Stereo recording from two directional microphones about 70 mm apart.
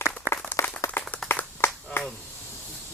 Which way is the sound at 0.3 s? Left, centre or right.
Right.